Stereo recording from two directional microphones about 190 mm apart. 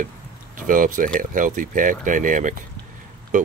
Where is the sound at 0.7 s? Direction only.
45° right (ahead or behind).